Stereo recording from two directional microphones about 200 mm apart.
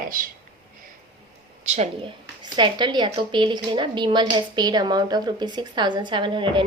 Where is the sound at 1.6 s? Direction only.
35° right (ahead or behind).